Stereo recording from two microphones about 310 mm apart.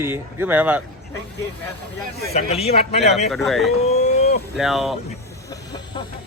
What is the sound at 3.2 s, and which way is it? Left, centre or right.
Speech, centre.